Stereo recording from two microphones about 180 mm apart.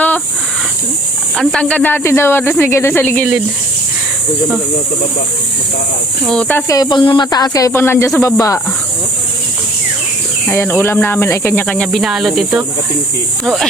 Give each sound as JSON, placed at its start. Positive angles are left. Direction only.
{"t": 1.4, "sound": "speech", "side_deg": 5}
{"t": 6.2, "sound": "speech", "side_deg": 5}
{"t": 6.7, "sound": "speech", "side_deg": 20}
{"t": 10.5, "sound": "speech", "side_deg": 10}